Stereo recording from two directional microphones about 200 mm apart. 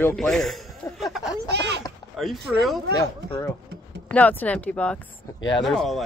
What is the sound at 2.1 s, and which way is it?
Speech, centre (ahead or behind).